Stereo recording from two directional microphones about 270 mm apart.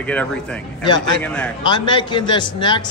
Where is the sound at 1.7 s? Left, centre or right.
Centre.